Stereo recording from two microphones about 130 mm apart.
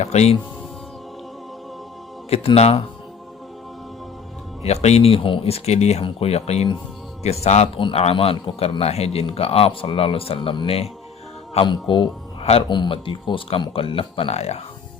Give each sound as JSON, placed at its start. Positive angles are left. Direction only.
{"t": 0.0, "sound": "speech", "side_deg": 55}
{"t": 2.3, "sound": "speech", "side_deg": 50}
{"t": 4.6, "sound": "speech", "side_deg": 55}
{"t": 7.8, "sound": "speech", "side_deg": 45}
{"t": 12.4, "sound": "speech", "side_deg": 50}